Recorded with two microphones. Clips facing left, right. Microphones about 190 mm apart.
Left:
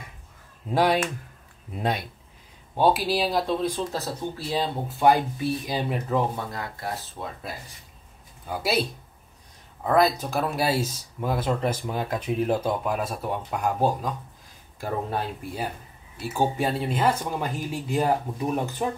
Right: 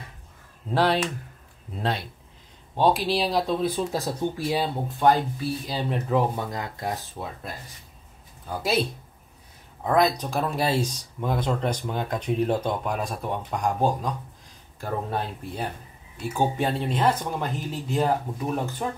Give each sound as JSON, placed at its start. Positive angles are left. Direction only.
{"t": 0.7, "sound": "speech", "side_deg": 10}
{"t": 4.8, "sound": "speech", "side_deg": 10}
{"t": 6.0, "sound": "speech", "side_deg": -5}
{"t": 6.5, "sound": "speech", "side_deg": -20}
{"t": 7.2, "sound": "speech", "side_deg": 5}
{"t": 9.8, "sound": "speech", "side_deg": 5}